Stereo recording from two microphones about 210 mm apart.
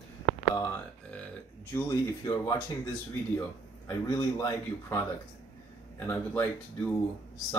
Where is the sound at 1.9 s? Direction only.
15° left (ahead or behind).